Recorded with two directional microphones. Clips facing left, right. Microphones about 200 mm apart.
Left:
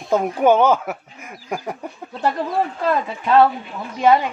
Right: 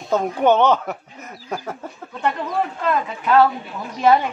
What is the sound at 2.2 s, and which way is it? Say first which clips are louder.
Speech: left 2 dB; 35° left (ahead or behind).